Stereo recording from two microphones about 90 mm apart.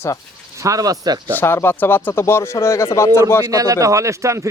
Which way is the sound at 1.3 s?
25° left (ahead or behind).